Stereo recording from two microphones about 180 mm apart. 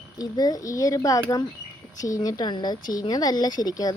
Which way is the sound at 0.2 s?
20° left (ahead or behind).